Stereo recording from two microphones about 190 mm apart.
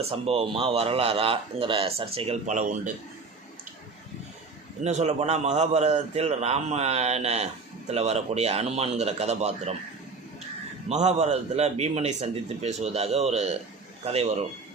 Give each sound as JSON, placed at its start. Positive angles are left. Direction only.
{"t": 0.0, "sound": "a man's voice", "side_deg": -30}
{"t": 4.8, "sound": "a man's voice", "side_deg": -35}
{"t": 10.8, "sound": "a man's voice", "side_deg": -35}